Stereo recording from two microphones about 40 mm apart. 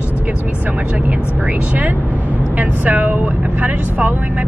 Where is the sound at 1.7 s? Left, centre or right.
Right.